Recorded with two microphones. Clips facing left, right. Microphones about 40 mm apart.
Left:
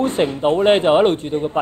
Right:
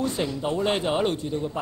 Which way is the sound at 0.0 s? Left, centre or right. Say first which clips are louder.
Left 9 dB; left.